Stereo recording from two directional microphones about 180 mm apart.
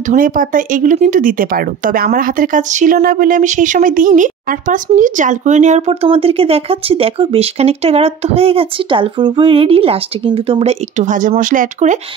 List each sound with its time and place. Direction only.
0.1 s speech: 50° right (ahead or behind)